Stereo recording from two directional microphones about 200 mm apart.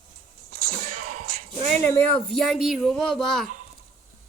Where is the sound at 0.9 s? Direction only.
40° right (ahead or behind).